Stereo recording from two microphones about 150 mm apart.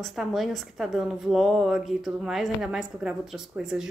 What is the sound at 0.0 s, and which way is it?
A woman's voice, centre (ahead or behind).